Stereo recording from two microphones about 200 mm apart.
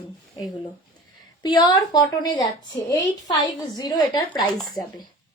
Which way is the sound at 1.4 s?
20° left (ahead or behind).